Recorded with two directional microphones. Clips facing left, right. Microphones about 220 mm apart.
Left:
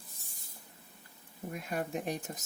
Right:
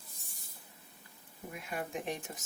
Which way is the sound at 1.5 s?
40° left (ahead or behind).